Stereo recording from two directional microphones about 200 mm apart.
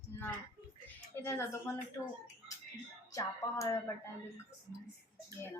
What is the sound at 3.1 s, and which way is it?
Speech, 15° left (ahead or behind).